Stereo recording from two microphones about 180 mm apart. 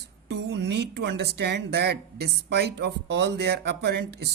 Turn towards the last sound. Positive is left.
turn(degrees=-70)  # may be behind; listen again after turning